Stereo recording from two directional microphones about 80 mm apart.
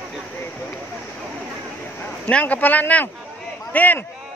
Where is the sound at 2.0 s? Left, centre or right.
Centre.